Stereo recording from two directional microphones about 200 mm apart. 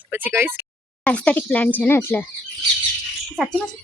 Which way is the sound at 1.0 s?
5° left (ahead or behind).